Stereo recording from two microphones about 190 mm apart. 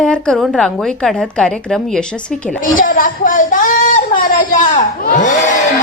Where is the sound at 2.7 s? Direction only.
45° left (ahead or behind).